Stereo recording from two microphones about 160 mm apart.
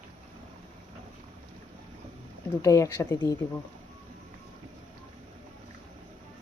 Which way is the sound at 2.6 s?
20° left (ahead or behind).